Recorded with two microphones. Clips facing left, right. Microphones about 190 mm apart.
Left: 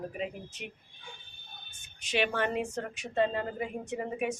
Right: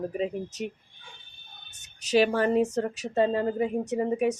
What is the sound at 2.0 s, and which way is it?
Speech, 40° right (ahead or behind).